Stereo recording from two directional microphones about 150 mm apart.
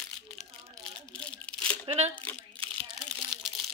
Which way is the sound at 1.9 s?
45° right (ahead or behind).